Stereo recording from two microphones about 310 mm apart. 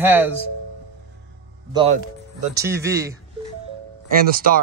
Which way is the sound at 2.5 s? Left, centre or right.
Centre.